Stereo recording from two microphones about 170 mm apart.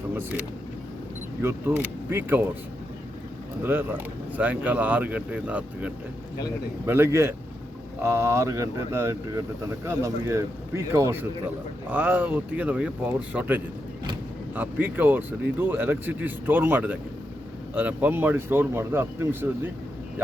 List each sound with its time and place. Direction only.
0.1 s vehicle: 15° right (ahead or behind)
1.4 s speech: 15° right (ahead or behind)
3.6 s speech: 10° right (ahead or behind)